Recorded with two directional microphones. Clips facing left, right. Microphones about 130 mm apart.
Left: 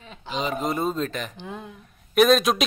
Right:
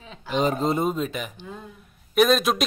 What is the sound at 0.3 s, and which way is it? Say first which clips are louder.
Speech: right 5 dB; 45° right (ahead or behind).